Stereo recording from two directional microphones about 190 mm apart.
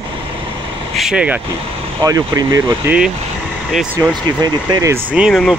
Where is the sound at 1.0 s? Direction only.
5° right (ahead or behind).